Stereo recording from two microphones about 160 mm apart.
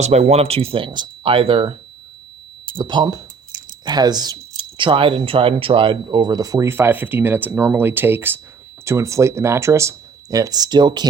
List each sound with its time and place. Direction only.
0.0 s speech: 45° right (ahead or behind)
2.7 s speech: 30° right (ahead or behind)